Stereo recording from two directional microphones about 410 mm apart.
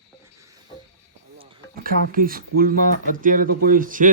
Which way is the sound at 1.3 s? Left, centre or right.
Right.